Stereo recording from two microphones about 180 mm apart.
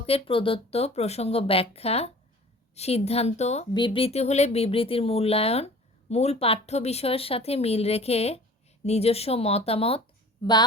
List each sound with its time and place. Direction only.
0.0 s speech: 30° left (ahead or behind)
3.8 s a woman's voice: 30° left (ahead or behind)